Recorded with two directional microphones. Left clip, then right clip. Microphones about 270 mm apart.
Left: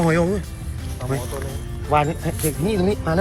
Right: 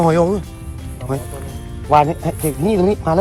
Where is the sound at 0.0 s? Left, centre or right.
Centre.